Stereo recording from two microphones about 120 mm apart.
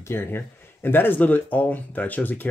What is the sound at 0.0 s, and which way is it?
Speech, 20° left (ahead or behind).